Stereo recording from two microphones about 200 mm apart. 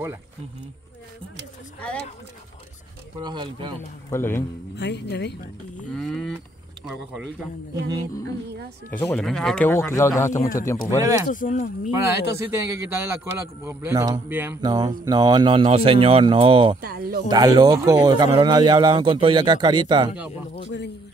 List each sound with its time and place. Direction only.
1.8 s speech: 5° left (ahead or behind)
3.2 s a man's voice: 20° right (ahead or behind)
4.1 s speech: 10° left (ahead or behind)
4.7 s speech: 60° left (ahead or behind)
5.9 s cattle: centre (ahead or behind)
8.9 s speech: 5° left (ahead or behind)
9.7 s speech: 15° left (ahead or behind)
11.2 s speech: 40° left (ahead or behind)
11.9 s a man's voice: 15° right (ahead or behind)
16.8 s speech: 50° right (ahead or behind)
17.3 s a man's voice: 20° right (ahead or behind)
20.6 s speech: 60° left (ahead or behind)